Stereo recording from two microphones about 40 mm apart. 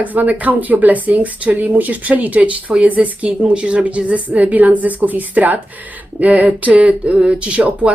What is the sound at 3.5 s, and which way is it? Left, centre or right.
Speech, right.